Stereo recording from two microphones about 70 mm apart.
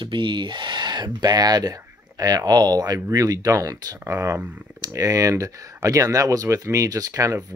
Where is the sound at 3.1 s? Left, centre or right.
Right.